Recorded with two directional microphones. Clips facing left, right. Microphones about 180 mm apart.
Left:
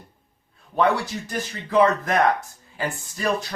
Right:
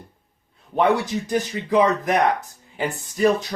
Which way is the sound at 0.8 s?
15° right (ahead or behind).